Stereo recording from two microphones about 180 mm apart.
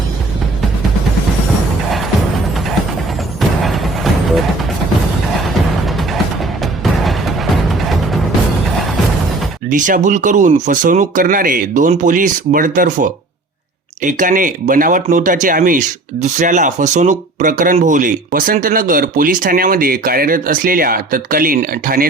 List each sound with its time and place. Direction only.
3.6 s music: centre (ahead or behind)
7.0 s music: centre (ahead or behind)
9.6 s speech: 45° right (ahead or behind)